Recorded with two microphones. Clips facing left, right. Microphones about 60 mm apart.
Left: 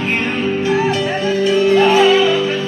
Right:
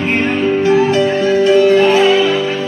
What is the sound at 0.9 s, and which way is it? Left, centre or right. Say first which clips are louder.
Music: right 5 dB; right.